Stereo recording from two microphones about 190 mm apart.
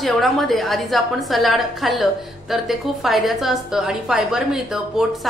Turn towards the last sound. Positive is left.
turn(degrees=-5)  # may be behind; listen again after turning